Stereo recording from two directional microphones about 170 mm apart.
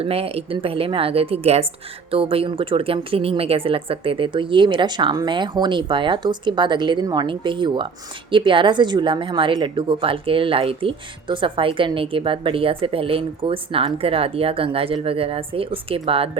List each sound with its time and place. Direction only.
0.0 s a woman's voice: 35° right (ahead or behind)